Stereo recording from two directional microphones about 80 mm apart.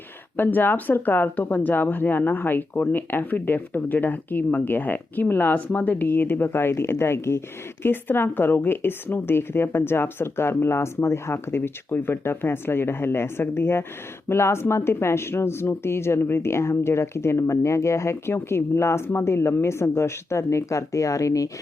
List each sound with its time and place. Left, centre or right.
0.3 s speech: left